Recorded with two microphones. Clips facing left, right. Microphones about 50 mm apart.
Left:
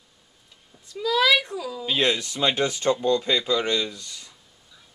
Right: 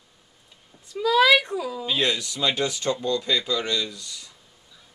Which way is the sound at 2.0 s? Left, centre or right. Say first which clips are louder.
Left 3 dB; left.